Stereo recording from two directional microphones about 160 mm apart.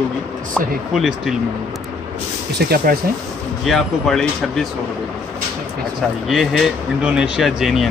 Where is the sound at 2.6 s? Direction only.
75° right (ahead or behind).